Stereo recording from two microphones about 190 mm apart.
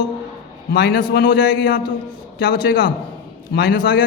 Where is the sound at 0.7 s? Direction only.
55° left (ahead or behind).